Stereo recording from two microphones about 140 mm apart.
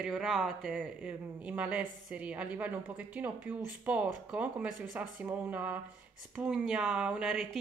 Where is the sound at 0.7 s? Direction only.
10° right (ahead or behind).